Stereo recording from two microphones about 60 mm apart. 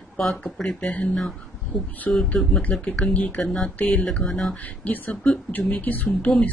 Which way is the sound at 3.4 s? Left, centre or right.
Centre.